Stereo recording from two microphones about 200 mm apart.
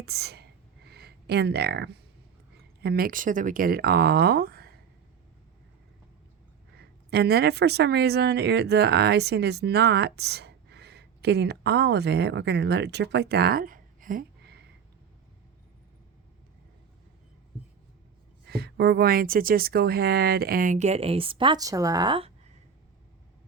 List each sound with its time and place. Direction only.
0.0 s speech: 55° right (ahead or behind)
6.7 s speech: 55° right (ahead or behind)
18.4 s speech: 55° right (ahead or behind); by 22.3 s 25° right (ahead or behind)